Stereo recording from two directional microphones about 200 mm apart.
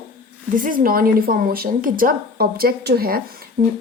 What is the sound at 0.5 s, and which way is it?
A woman's voice, 45° right (ahead or behind).